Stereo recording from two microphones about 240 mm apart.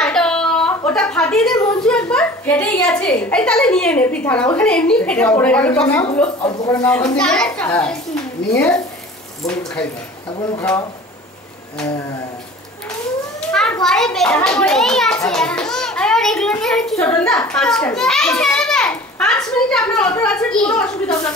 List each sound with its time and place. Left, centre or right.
0.0 s a sound: centre
1.9 s a child's voice: centre
8.4 s speech: left
9.4 s a child's voice: centre
13.5 s a child's voice: centre